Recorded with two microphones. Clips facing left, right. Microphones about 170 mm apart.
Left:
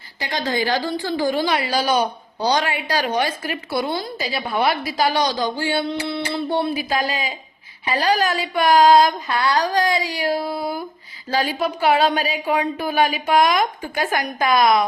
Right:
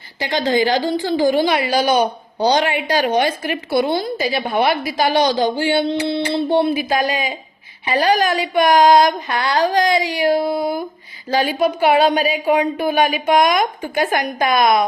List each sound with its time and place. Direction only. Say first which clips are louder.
0.2 s a woman's voice: right 6 dB; 25° right (ahead or behind)